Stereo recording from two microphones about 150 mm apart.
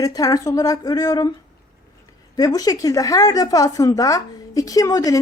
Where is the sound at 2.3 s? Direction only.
25° left (ahead or behind).